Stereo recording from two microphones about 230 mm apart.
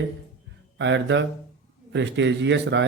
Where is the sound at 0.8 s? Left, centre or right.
Right.